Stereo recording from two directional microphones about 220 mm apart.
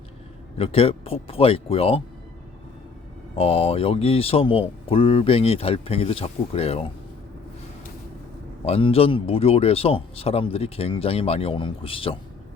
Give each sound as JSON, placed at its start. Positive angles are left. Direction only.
{"t": 0.5, "sound": "speech", "side_deg": 25}
{"t": 3.3, "sound": "speech", "side_deg": 25}
{"t": 8.6, "sound": "speech", "side_deg": 25}